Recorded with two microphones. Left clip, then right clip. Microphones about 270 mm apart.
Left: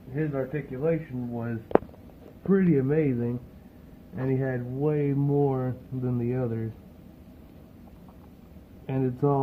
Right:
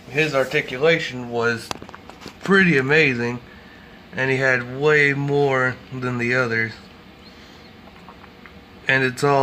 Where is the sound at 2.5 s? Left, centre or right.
Centre.